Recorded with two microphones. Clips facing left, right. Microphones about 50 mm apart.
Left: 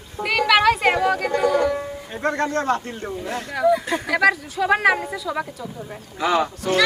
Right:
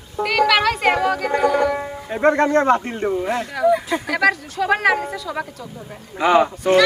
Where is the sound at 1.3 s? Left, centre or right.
Centre.